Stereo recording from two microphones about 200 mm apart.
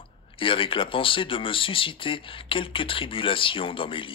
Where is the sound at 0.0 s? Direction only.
25° left (ahead or behind).